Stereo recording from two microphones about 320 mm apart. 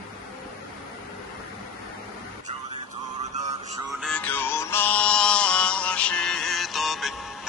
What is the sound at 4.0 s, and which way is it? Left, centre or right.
Music, centre.